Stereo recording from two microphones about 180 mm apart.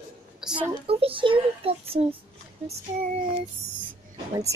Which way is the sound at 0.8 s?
30° right (ahead or behind).